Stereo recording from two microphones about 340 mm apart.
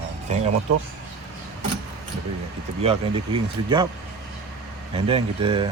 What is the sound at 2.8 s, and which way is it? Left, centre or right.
Speech, centre.